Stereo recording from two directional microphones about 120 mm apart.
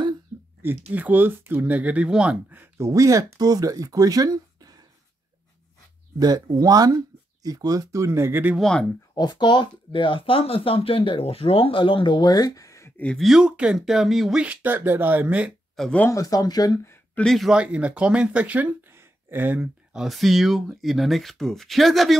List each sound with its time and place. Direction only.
0.6 s speech: 15° right (ahead or behind); by 4.8 s 30° right (ahead or behind)
6.1 s speech: 30° right (ahead or behind)
8.5 s speech: 5° left (ahead or behind)
9.1 s speech: 35° left (ahead or behind)
12.9 s speech: 10° left (ahead or behind)
14.4 s speech: 10° right (ahead or behind)
15.7 s speech: 5° left (ahead or behind)
16.1 s speech: 30° left (ahead or behind)
16.8 s a sound: 20° left (ahead or behind)
17.2 s speech: centre (ahead or behind)